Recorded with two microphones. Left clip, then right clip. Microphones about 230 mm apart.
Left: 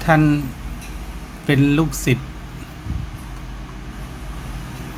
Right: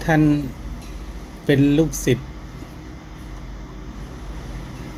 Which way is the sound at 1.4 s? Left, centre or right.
Left.